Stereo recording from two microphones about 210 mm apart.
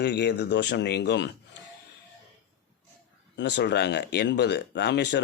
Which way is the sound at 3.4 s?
55° left (ahead or behind).